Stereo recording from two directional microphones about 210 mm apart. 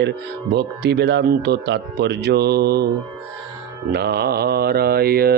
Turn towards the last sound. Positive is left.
turn(degrees=-45)  # may be behind; listen again after turning